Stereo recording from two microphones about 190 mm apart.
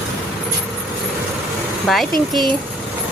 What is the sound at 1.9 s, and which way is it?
Speech, centre (ahead or behind).